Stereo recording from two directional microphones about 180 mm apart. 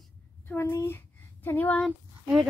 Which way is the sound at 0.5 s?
15° left (ahead or behind).